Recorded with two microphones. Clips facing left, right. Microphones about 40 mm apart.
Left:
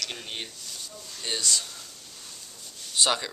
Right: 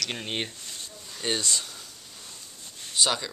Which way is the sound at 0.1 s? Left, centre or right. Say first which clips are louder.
Right 5 dB; right.